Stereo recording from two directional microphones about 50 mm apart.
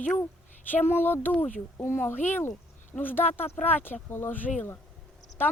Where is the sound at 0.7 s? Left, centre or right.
Left.